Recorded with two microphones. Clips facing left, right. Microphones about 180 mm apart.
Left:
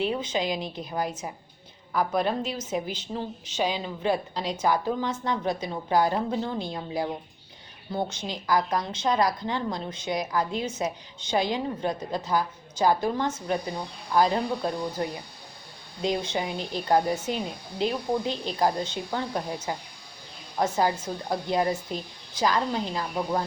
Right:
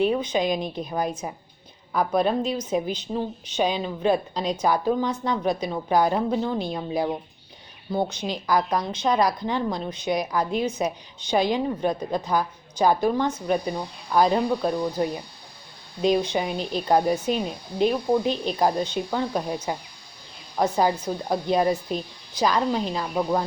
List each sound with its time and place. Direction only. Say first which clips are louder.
0.0 s a woman's voice: right 5 dB; 15° right (ahead or behind)